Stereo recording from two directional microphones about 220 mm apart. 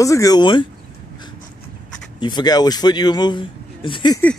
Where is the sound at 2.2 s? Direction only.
20° left (ahead or behind).